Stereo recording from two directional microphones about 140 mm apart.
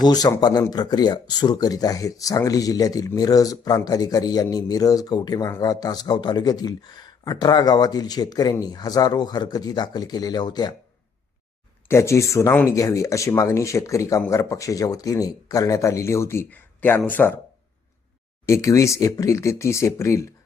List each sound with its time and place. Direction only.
0.0 s speech: 30° left (ahead or behind)
11.9 s speech: 20° left (ahead or behind)
18.4 s speech: 20° left (ahead or behind)